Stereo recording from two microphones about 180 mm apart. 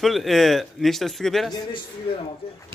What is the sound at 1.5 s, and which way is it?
A man's voice, 25° left (ahead or behind).